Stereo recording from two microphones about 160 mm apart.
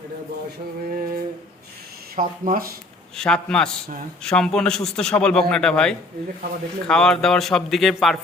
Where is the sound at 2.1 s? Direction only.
60° right (ahead or behind).